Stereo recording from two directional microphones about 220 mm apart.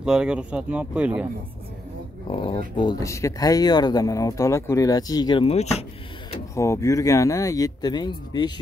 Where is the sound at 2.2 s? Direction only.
25° left (ahead or behind).